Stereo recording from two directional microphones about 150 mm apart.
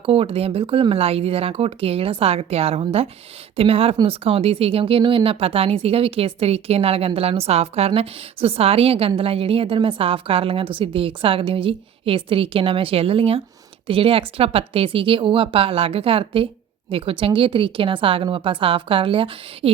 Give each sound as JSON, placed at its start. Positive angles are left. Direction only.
{"t": 0.0, "sound": "speech", "side_deg": -40}